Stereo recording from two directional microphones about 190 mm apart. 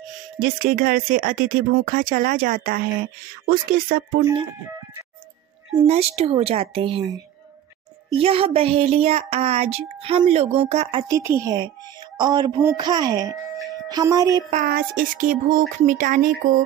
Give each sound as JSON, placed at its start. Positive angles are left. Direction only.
{"t": 0.4, "sound": "speech", "side_deg": -50}
{"t": 4.2, "sound": "speech", "side_deg": -25}
{"t": 5.8, "sound": "speech", "side_deg": -30}
{"t": 14.5, "sound": "speech", "side_deg": -50}